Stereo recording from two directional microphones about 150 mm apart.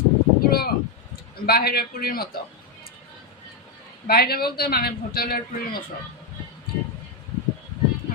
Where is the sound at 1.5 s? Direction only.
90° left.